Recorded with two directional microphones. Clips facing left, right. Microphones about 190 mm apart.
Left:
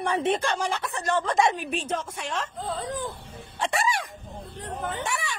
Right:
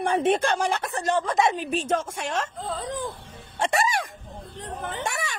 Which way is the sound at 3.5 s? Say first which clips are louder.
Right 3 dB; 45° right (ahead or behind).